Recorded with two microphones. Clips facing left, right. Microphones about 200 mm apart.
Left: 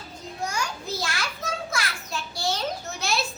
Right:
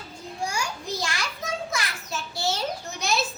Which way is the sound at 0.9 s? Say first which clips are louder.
Even; centre (ahead or behind).